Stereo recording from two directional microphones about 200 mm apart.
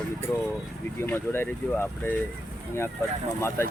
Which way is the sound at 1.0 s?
10° left (ahead or behind).